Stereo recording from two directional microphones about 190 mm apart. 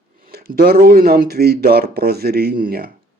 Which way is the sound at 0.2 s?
50° right (ahead or behind).